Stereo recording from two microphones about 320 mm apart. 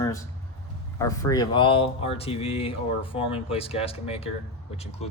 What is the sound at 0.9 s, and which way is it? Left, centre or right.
Speech, centre.